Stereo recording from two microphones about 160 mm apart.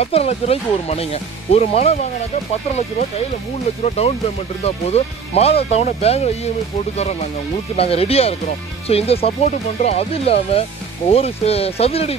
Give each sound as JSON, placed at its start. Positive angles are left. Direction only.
{"t": 0.0, "sound": "speech", "side_deg": 40}
{"t": 3.8, "sound": "speech", "side_deg": 40}